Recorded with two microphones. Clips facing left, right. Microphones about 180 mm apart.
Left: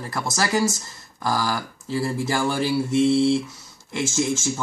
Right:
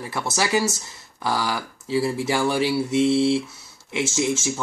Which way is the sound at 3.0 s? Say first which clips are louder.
Left 1 dB; 70° right (ahead or behind).